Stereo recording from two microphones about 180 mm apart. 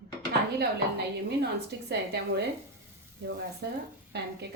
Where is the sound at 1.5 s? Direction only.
65° right (ahead or behind).